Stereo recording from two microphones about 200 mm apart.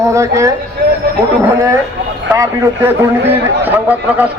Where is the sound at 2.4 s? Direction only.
10° right (ahead or behind).